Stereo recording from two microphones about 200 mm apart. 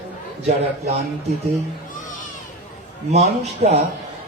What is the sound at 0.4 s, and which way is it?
Speech, 35° right (ahead or behind).